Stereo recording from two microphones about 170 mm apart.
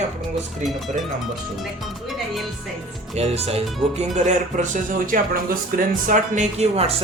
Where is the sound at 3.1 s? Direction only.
35° right (ahead or behind).